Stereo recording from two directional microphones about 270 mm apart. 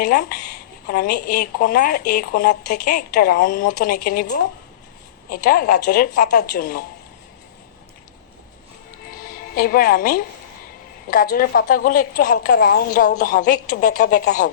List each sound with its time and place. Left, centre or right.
0.0 s a woman's voice: left
9.2 s a woman's voice: left